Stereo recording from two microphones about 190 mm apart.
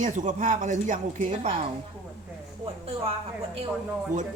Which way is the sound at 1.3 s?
30° right (ahead or behind).